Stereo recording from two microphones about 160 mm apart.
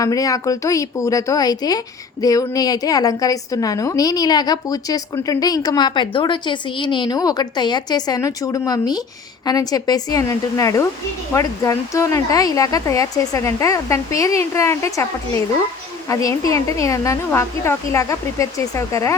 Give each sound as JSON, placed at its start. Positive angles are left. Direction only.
{"t": 0.0, "sound": "a woman's voice", "side_deg": 20}
{"t": 16.0, "sound": "a woman's voice", "side_deg": 20}